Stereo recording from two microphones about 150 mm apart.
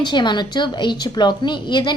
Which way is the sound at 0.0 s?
30° left (ahead or behind).